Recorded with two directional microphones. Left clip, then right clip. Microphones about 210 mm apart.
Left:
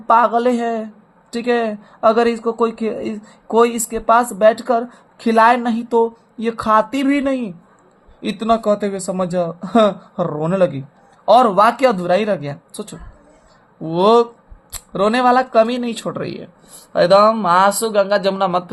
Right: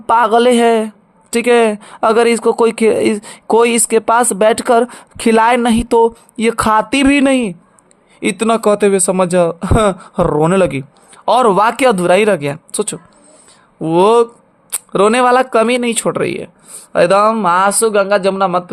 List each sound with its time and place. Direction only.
0.1 s speech: 40° right (ahead or behind); by 18.7 s 25° right (ahead or behind)